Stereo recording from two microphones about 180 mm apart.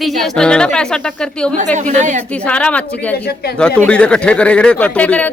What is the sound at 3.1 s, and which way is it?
Speech, 60° left (ahead or behind).